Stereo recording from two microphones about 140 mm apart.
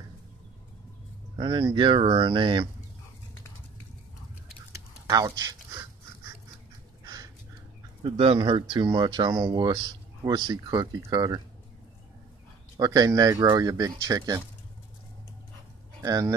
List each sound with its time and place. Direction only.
1.4 s speech: 35° right (ahead or behind)
4.7 s a sound: 25° right (ahead or behind)
8.0 s speech: 35° right (ahead or behind)
12.7 s speech: 25° right (ahead or behind)
16.0 s speech: 25° right (ahead or behind)